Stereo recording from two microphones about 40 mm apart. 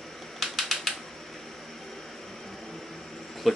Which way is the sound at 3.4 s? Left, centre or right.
Centre.